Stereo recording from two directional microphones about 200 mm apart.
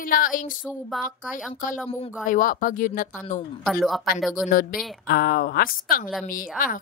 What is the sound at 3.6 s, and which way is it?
Speech, centre (ahead or behind).